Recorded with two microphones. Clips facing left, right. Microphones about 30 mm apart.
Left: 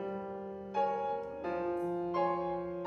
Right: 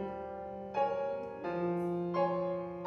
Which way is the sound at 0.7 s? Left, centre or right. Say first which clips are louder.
Even; centre.